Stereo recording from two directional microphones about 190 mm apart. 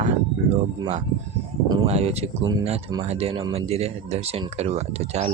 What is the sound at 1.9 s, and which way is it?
Speech, 35° right (ahead or behind).